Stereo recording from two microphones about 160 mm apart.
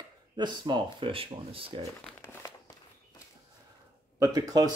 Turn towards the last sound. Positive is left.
turn(degrees=-25)  # may be behind; listen again after turning